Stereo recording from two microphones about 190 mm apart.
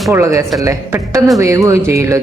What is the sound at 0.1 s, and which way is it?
Speech, 15° right (ahead or behind).